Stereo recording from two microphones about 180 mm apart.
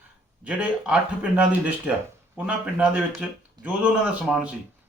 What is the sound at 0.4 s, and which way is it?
Speech, 5° right (ahead or behind).